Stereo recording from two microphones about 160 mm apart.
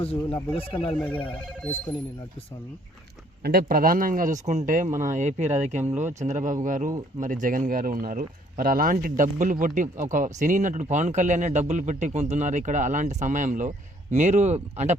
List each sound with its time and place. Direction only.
0.0 s speech: 40° left (ahead or behind)
3.4 s speech: 70° right (ahead or behind); by 14.9 s 45° right (ahead or behind)